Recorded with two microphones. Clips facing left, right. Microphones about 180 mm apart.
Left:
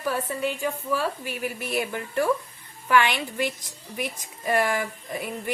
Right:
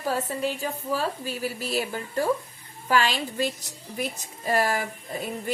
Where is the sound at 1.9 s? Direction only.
25° right (ahead or behind).